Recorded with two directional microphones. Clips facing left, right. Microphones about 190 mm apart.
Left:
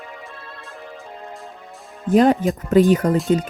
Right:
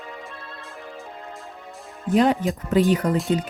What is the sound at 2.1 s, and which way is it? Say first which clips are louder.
Speech: left 4 dB; 45° left (ahead or behind).